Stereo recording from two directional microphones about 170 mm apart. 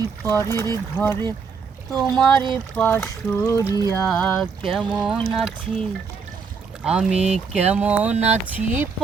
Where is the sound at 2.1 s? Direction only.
25° right (ahead or behind).